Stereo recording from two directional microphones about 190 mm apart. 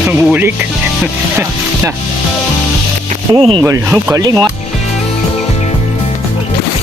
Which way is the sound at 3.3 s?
30° right (ahead or behind).